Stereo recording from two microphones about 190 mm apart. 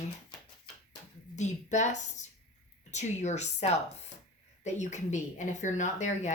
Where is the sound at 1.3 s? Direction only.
40° left (ahead or behind).